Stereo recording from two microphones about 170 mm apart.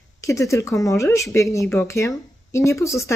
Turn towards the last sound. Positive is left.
turn(degrees=15)  # may be behind; listen again after turning